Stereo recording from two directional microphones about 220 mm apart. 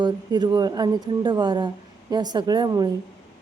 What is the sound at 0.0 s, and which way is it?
A woman's voice, 20° right (ahead or behind).